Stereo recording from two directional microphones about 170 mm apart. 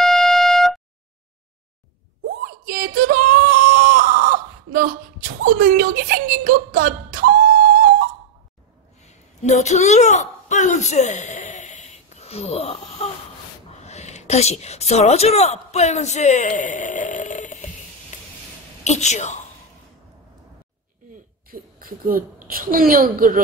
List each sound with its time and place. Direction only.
0.0 s shofar: 5° left (ahead or behind)
2.4 s a sound: 60° right (ahead or behind)
9.0 s a sound: 40° left (ahead or behind)
13.8 s a woman's voice: 40° left (ahead or behind)
18.9 s a woman's voice: 40° left (ahead or behind)
21.5 s a woman's voice: 55° right (ahead or behind)